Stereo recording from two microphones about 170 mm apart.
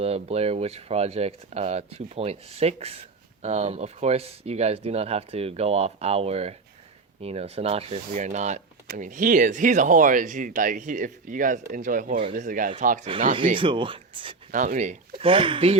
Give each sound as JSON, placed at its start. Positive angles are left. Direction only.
{"t": 0.0, "sound": "speech", "side_deg": -35}
{"t": 13.6, "sound": "speech", "side_deg": -30}
{"t": 14.5, "sound": "speech", "side_deg": -50}
{"t": 15.1, "sound": "speech", "side_deg": -30}